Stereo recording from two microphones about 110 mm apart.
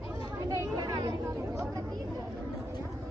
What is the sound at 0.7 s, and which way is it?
Children playing, 35° right (ahead or behind).